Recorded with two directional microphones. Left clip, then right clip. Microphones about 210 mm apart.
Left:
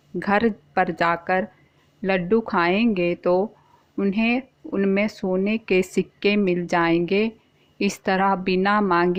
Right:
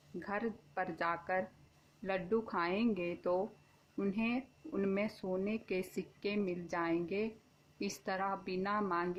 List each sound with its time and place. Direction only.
0.2 s speech: 40° left (ahead or behind)